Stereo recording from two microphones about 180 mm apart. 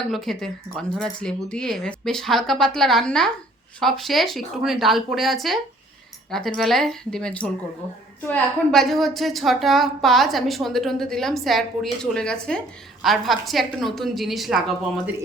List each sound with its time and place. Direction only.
0.1 s a woman's voice: centre (ahead or behind)
6.6 s a woman's voice: centre (ahead or behind)